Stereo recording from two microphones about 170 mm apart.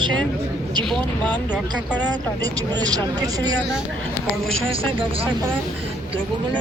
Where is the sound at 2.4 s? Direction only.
20° right (ahead or behind).